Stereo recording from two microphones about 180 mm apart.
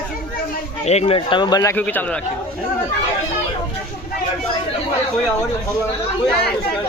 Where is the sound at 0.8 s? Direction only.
35° left (ahead or behind); by 2.0 s 10° left (ahead or behind).